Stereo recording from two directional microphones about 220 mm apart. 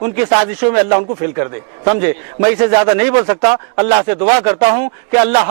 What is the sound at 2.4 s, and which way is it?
A man's voice, 20° right (ahead or behind).